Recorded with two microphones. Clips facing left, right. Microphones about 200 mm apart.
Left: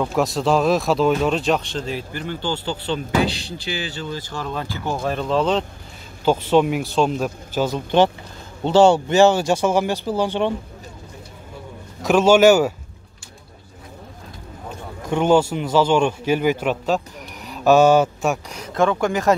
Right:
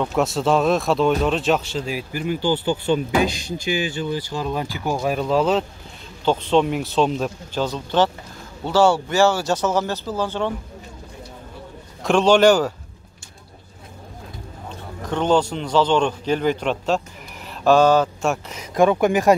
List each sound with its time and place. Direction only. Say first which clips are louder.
0.0 s speech: even; centre (ahead or behind)
6.2 s a man's voice: left 2 dB; 5° left (ahead or behind)
12.0 s a man's voice: left 1 dB; 5° left (ahead or behind)
15.0 s a man's voice: left 2 dB; 10° left (ahead or behind)
18.8 s speech: right 3 dB; 15° right (ahead or behind)